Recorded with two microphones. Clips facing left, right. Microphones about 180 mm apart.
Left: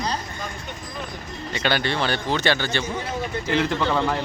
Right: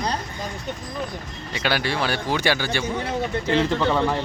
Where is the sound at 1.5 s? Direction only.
5° right (ahead or behind).